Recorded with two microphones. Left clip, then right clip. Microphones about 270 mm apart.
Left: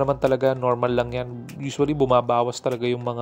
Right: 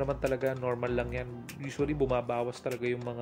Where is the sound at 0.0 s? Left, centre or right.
Left.